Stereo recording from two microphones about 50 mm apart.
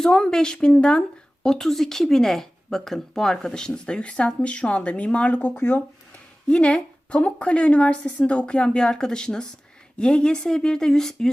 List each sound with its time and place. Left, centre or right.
0.0 s speech: centre
1.5 s a woman's voice: centre; by 5.8 s left
6.5 s a woman's voice: left